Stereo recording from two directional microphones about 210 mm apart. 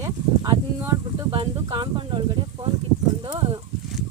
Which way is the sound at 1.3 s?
25° right (ahead or behind).